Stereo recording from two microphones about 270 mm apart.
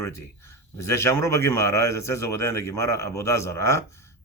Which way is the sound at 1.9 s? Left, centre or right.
Centre.